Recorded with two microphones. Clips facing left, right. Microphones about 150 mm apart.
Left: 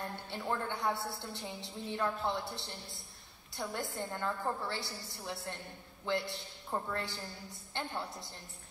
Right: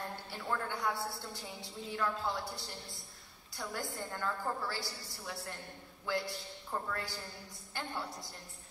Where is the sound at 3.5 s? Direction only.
25° left (ahead or behind).